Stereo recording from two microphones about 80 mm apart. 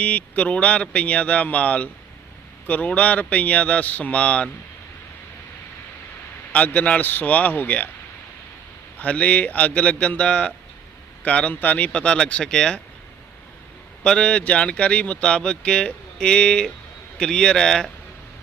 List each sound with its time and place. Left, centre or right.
0.0 s speech: centre
6.5 s speech: centre
9.0 s speech: centre
14.0 s speech: centre